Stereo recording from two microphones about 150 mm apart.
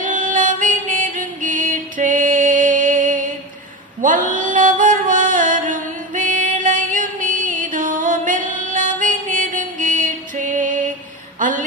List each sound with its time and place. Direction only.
0.0 s music: 60° right (ahead or behind)
4.0 s mantra: 60° right (ahead or behind)
11.3 s a sound: 60° right (ahead or behind)